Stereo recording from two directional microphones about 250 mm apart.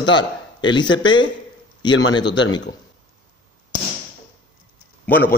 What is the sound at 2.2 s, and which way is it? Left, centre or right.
Speech, left.